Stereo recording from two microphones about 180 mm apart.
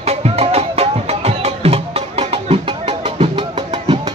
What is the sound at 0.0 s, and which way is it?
Music, 35° right (ahead or behind).